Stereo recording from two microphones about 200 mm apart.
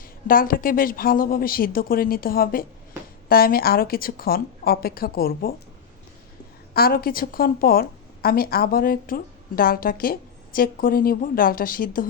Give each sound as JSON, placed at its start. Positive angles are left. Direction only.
{"t": 0.0, "sound": "a woman's voice", "side_deg": 45}
{"t": 6.7, "sound": "a woman's voice", "side_deg": 50}